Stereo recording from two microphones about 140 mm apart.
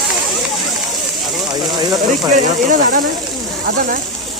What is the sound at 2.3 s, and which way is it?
Speech, 65° right (ahead or behind).